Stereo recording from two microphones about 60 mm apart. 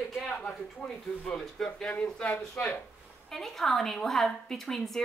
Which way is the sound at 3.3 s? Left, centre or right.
Centre.